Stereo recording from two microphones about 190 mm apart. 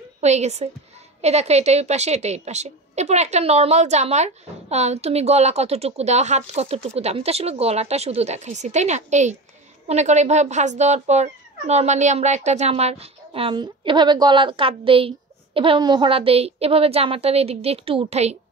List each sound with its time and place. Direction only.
0.2 s speech: 35° right (ahead or behind)